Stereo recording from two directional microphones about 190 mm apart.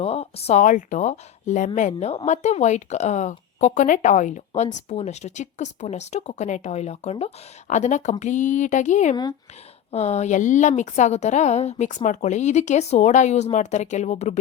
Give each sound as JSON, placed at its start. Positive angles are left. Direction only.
{"t": 0.0, "sound": "a woman's voice", "side_deg": 30}